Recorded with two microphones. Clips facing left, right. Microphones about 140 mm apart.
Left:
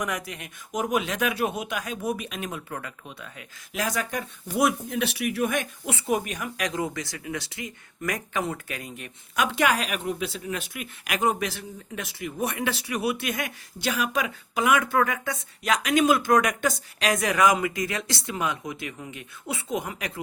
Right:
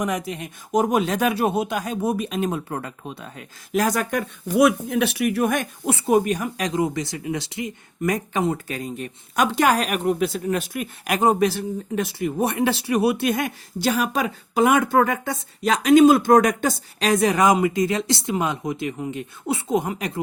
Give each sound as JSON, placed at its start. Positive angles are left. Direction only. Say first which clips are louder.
{"t": 0.0, "sound": "speech", "louder": "right 6 dB", "side_deg": -25}
{"t": 4.5, "sound": "speech", "louder": "right 7 dB", "side_deg": -65}